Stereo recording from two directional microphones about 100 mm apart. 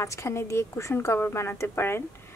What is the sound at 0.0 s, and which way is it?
Speech, 30° left (ahead or behind).